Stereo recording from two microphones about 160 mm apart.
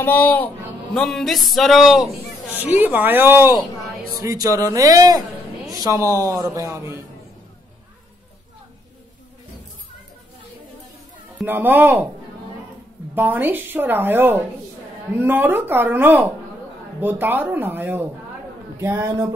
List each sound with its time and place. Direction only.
0.0 s a man's voice: 10° left (ahead or behind); by 7.1 s 15° right (ahead or behind)
11.4 s speech: 10° right (ahead or behind)
13.1 s speech: 10° right (ahead or behind)